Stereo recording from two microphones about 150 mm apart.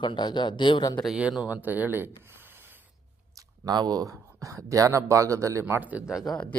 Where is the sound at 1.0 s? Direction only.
5° right (ahead or behind).